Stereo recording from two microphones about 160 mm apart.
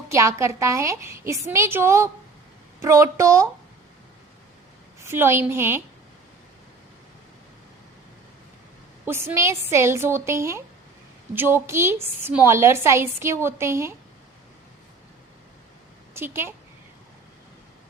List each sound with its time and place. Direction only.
0.1 s a woman's voice: 20° right (ahead or behind)
5.0 s a woman's voice: 15° right (ahead or behind)
9.0 s a woman's voice: 15° right (ahead or behind)
16.1 s a woman's voice: 15° right (ahead or behind)